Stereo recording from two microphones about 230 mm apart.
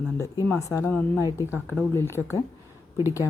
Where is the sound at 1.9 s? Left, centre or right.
Centre.